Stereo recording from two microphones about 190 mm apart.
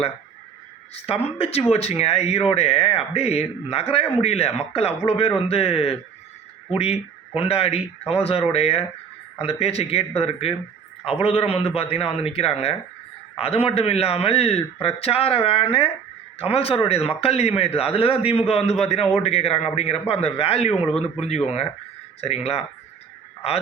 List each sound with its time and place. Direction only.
0.9 s a man's voice: 30° left (ahead or behind)